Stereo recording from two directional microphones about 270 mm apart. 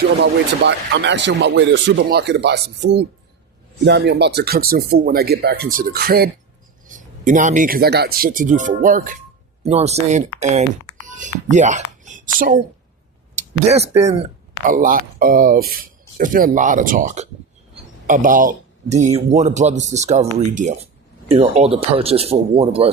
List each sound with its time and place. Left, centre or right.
0.2 s speech: right